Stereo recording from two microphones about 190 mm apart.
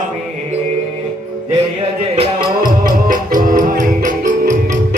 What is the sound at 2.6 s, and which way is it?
Music, 45° right (ahead or behind).